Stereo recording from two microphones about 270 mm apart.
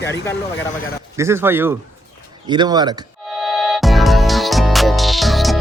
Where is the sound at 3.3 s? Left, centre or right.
Centre.